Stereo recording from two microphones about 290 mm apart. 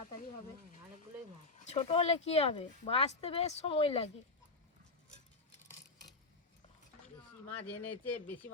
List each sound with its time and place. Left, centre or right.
1.6 s speech: left
7.9 s speech: left